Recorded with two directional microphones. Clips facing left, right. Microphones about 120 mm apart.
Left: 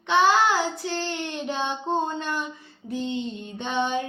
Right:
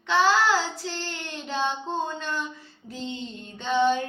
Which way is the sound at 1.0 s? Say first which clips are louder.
Left 6 dB; 15° left (ahead or behind).